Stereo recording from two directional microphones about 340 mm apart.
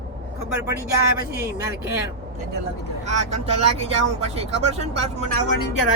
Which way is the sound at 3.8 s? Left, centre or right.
Centre.